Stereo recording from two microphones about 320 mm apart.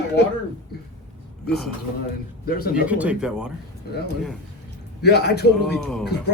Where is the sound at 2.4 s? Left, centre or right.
Left.